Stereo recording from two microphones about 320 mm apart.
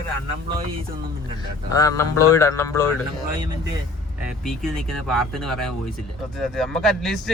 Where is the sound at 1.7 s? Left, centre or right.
Centre.